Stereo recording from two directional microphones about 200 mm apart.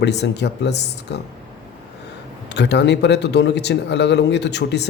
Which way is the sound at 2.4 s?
60° left (ahead or behind).